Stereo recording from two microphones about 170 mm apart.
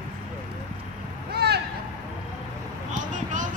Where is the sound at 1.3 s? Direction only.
70° right (ahead or behind).